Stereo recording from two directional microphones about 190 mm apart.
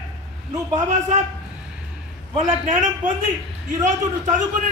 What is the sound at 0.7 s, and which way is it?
Speech, 40° right (ahead or behind).